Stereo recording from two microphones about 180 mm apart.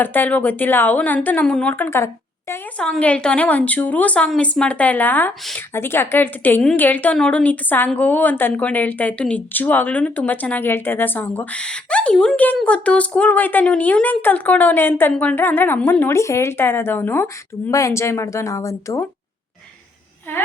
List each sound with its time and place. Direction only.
0.0 s a woman's voice: 10° left (ahead or behind)